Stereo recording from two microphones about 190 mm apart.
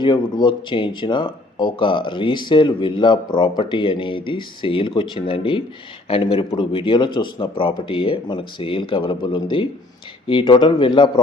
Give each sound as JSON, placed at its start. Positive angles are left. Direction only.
{"t": 0.0, "sound": "speech", "side_deg": 25}